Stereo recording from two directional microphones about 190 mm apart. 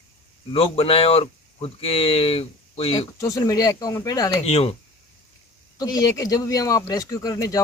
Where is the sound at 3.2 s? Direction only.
15° left (ahead or behind).